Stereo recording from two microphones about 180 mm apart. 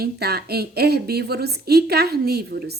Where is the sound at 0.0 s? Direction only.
60° right (ahead or behind).